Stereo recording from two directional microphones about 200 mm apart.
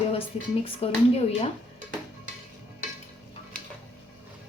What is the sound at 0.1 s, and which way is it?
A woman's voice, 30° left (ahead or behind).